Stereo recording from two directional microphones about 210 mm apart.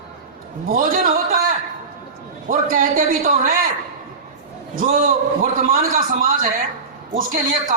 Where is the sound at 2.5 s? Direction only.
40° right (ahead or behind).